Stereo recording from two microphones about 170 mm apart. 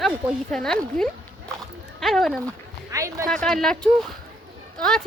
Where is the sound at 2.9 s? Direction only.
15° right (ahead or behind).